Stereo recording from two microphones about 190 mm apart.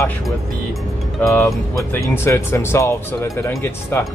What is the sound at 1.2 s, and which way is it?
Speech, 10° left (ahead or behind).